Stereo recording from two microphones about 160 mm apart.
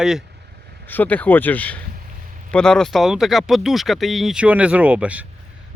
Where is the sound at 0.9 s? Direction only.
10° left (ahead or behind).